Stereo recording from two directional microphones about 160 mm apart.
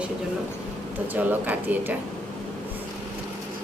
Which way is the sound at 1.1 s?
10° right (ahead or behind).